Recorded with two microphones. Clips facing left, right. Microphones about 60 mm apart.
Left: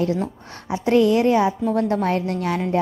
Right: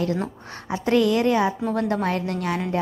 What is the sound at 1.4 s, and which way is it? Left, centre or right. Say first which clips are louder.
Speech: left 3 dB; right.